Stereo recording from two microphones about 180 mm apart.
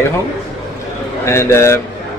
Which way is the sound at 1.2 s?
15° left (ahead or behind).